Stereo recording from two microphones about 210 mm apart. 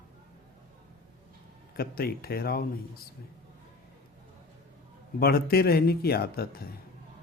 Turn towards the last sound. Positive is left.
turn(degrees=50)  # may be behind; listen again after turning